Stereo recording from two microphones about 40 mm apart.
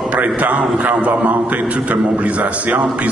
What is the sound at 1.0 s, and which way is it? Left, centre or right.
A man's voice, right.